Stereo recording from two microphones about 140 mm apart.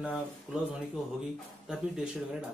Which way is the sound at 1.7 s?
5° right (ahead or behind).